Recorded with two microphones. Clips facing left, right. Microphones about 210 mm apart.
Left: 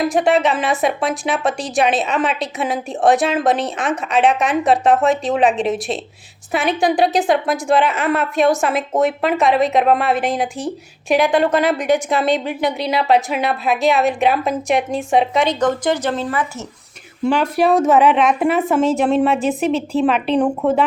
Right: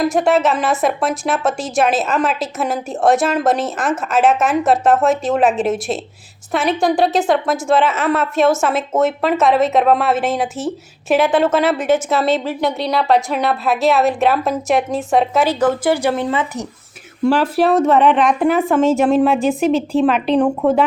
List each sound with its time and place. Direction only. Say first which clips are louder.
0.0 s a woman's voice: right 1 dB; centre (ahead or behind)
16.3 s speech: right 2 dB; 25° right (ahead or behind)
17.3 s a woman's voice: even; 5° right (ahead or behind)